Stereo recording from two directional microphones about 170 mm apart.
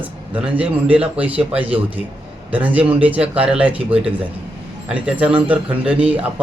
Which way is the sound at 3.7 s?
35° right (ahead or behind).